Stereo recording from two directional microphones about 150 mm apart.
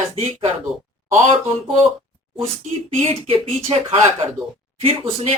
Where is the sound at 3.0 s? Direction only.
40° right (ahead or behind).